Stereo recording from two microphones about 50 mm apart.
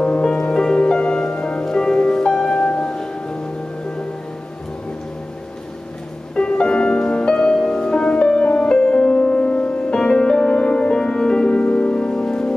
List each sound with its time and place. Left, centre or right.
0.0 s music: centre
6.3 s music: centre